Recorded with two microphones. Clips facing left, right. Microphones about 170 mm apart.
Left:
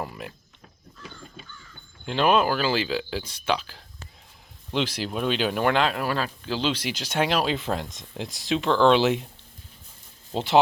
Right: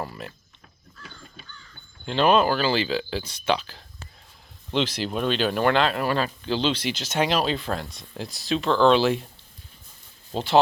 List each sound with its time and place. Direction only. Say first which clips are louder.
0.0 s speech: even; 10° left (ahead or behind)
2.0 s speech: right 2 dB; 10° left (ahead or behind)
7.5 s speech: left 1 dB; 20° left (ahead or behind)
10.3 s speech: even; 20° left (ahead or behind)